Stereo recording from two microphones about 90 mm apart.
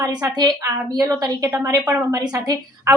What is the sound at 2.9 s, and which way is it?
Speech, 30° right (ahead or behind).